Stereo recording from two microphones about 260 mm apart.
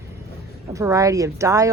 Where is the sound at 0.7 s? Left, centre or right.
Centre.